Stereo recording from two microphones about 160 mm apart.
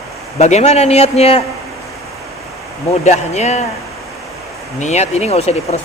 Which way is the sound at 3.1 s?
45° left (ahead or behind).